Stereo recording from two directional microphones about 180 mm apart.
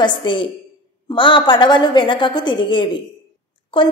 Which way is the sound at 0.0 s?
25° left (ahead or behind).